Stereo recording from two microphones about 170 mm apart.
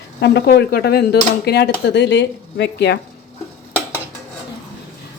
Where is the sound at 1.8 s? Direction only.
85° left.